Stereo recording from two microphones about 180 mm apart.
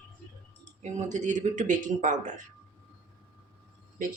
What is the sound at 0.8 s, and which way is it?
Speech, 40° right (ahead or behind).